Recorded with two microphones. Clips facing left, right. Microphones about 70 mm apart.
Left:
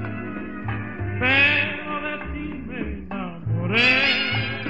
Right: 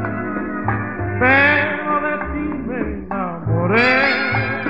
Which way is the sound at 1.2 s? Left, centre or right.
Right.